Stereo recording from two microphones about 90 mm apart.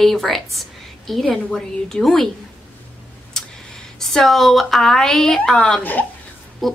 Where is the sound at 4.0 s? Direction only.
5° left (ahead or behind).